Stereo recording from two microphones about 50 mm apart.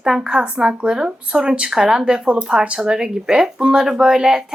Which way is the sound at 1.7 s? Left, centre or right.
Centre.